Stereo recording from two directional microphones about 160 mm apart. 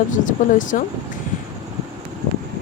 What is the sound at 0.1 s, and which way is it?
Speech, 55° left (ahead or behind).